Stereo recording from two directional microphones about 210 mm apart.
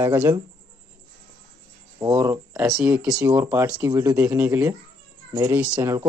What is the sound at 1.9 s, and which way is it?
Speech, 15° right (ahead or behind).